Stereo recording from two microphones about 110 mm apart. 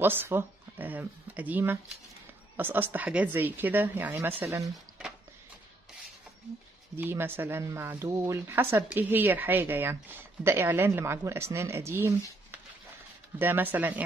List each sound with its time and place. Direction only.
0.0 s speech: 20° right (ahead or behind)
7.0 s speech: 20° right (ahead or behind)